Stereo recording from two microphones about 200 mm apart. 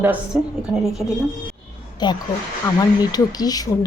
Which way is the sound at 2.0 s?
20° left (ahead or behind).